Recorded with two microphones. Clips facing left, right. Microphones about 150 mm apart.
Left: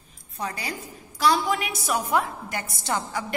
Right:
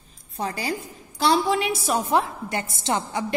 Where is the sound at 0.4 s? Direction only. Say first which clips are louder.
Right 4 dB; 30° right (ahead or behind).